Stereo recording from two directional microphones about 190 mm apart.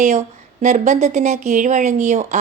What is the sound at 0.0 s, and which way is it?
A woman's voice, 40° right (ahead or behind).